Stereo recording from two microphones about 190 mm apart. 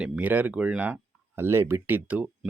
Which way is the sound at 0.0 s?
10° right (ahead or behind).